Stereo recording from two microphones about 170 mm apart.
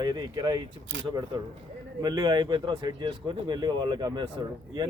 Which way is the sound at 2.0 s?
25° right (ahead or behind).